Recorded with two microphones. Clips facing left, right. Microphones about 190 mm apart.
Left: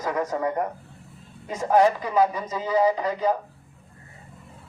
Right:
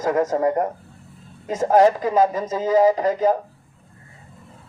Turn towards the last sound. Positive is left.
turn(degrees=-45)  # may be behind; listen again after turning